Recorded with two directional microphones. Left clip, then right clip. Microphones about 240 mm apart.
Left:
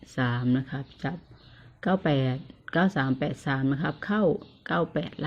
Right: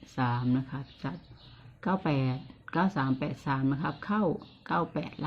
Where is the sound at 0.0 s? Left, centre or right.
Left.